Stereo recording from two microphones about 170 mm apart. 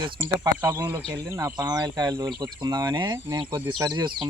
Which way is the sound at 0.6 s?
15° right (ahead or behind).